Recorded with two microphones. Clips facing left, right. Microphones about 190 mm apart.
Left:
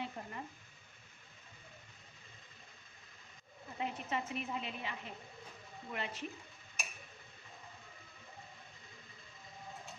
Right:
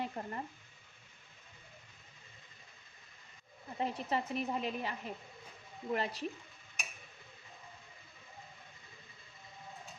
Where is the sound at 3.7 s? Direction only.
35° right (ahead or behind).